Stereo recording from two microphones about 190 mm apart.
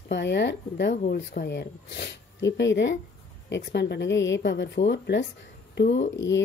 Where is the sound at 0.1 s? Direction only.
65° left (ahead or behind).